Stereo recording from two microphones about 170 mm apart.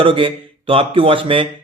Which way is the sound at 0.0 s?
30° right (ahead or behind).